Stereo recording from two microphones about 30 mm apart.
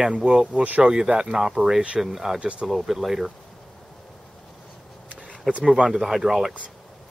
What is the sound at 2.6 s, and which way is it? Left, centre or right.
Speech, centre.